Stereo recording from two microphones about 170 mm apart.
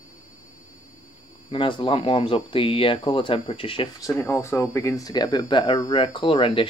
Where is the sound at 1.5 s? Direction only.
30° left (ahead or behind).